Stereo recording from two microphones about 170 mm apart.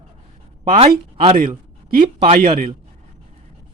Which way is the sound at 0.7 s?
35° right (ahead or behind).